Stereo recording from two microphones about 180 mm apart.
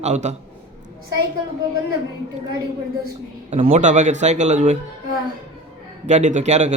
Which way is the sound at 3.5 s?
35° right (ahead or behind).